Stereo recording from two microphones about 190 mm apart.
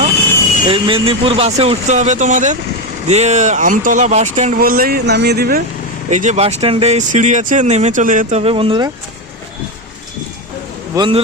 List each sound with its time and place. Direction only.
0.7 s speech: 30° right (ahead or behind); by 5.6 s 55° right (ahead or behind)
6.1 s speech: 40° right (ahead or behind)
10.9 s speech: 25° right (ahead or behind)